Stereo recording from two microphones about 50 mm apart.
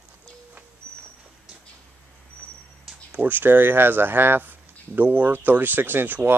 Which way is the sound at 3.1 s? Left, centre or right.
Right.